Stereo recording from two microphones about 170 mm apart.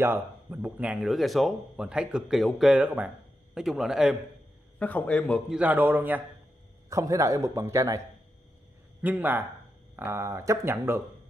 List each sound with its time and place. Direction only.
0.0 s speech: 10° right (ahead or behind)
4.7 s a man's voice: 10° left (ahead or behind)
5.5 s a man's voice: 10° right (ahead or behind)
9.0 s speech: 10° right (ahead or behind)